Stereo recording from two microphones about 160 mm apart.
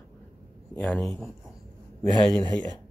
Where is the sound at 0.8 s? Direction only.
5° left (ahead or behind).